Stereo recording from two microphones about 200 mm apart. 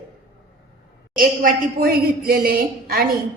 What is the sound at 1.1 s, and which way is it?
A woman's voice, 45° right (ahead or behind).